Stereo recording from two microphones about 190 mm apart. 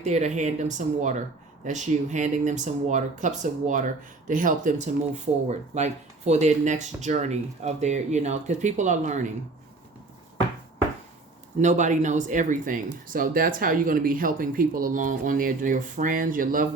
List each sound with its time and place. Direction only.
0.0 s speech: 40° right (ahead or behind)
11.6 s speech: 40° right (ahead or behind)